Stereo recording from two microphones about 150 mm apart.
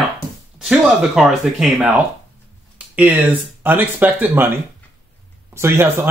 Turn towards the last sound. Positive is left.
turn(degrees=-15)  # may be behind; listen again after turning